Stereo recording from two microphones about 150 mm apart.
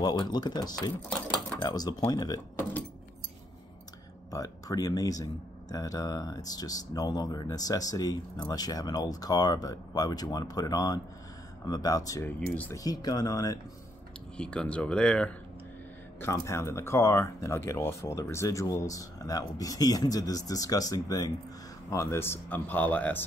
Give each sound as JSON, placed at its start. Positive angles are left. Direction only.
{"t": 0.0, "sound": "speech", "side_deg": 30}
{"t": 4.3, "sound": "speech", "side_deg": 25}
{"t": 14.3, "sound": "speech", "side_deg": 5}
{"t": 16.2, "sound": "speech", "side_deg": 20}